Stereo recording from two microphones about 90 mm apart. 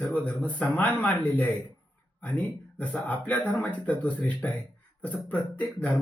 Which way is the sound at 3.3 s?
15° left (ahead or behind).